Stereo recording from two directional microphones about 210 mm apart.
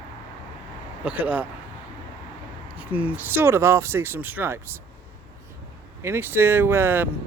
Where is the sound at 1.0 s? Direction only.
5° right (ahead or behind).